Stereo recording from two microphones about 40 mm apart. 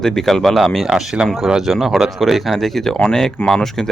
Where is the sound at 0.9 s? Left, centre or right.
Centre.